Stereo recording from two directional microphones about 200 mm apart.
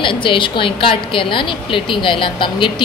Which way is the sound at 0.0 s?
25° left (ahead or behind).